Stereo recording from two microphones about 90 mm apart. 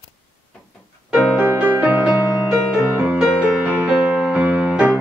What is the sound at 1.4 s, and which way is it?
Music, 20° right (ahead or behind).